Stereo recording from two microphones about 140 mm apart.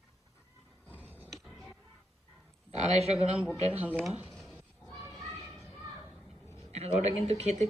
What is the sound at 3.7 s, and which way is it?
Speech, 10° right (ahead or behind).